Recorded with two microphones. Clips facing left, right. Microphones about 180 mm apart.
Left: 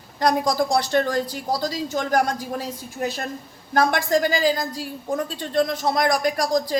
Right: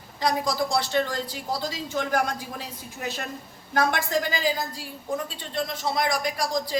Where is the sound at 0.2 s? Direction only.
45° left (ahead or behind).